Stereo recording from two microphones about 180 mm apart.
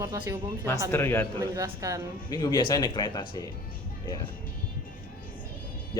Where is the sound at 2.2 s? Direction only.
20° left (ahead or behind).